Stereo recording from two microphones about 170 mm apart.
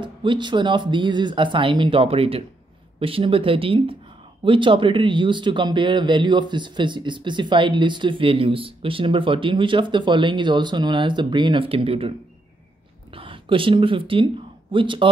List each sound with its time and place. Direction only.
0.0 s speech: 30° right (ahead or behind)
13.1 s speech: 30° right (ahead or behind)